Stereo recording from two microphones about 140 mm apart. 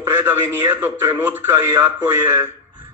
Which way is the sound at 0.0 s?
15° right (ahead or behind).